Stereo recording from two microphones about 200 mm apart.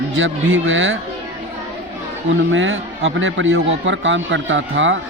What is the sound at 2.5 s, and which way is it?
A man's voice, 70° right (ahead or behind).